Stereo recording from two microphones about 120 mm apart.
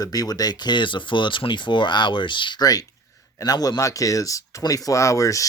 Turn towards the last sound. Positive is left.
turn(degrees=30)  # may be behind; listen again after turning